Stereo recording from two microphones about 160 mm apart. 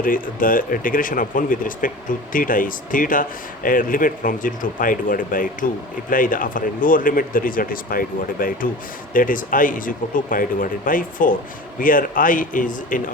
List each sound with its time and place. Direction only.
0.0 s speech: 60° left (ahead or behind)